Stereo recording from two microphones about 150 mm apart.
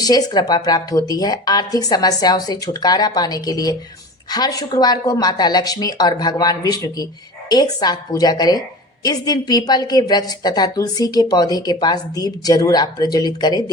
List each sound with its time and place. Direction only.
0.0 s a woman's voice: 25° left (ahead or behind)